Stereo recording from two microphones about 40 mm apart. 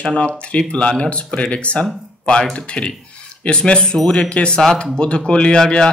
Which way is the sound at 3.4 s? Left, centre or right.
Left.